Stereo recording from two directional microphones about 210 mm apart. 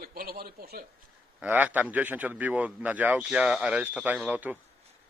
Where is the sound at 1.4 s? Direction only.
5° right (ahead or behind).